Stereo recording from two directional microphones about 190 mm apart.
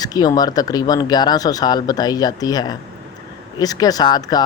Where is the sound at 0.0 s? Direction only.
20° left (ahead or behind).